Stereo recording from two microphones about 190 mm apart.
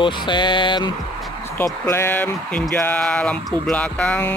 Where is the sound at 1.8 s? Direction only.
10° left (ahead or behind).